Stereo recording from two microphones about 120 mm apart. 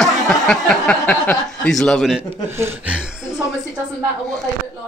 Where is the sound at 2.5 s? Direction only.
20° right (ahead or behind).